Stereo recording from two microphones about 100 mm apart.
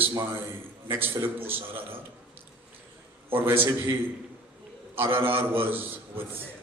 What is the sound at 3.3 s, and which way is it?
Speech, 20° right (ahead or behind).